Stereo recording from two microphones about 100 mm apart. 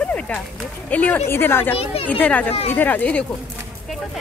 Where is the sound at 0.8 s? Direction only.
15° left (ahead or behind).